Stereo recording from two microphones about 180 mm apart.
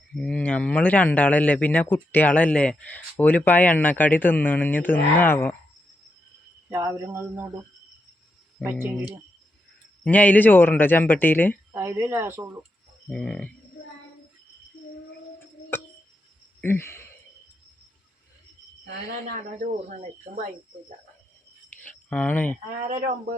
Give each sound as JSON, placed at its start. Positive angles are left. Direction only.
{"t": 0.1, "sound": "a man's voice", "side_deg": 5}
{"t": 6.7, "sound": "speech", "side_deg": -15}
{"t": 8.6, "sound": "speech", "side_deg": -10}
{"t": 10.0, "sound": "a man's voice", "side_deg": 10}
{"t": 11.7, "sound": "speech", "side_deg": -15}
{"t": 13.1, "sound": "a sound", "side_deg": 5}
{"t": 16.6, "sound": "speech", "side_deg": 10}
{"t": 19.4, "sound": "speech", "side_deg": -45}
{"t": 21.8, "sound": "speech", "side_deg": 5}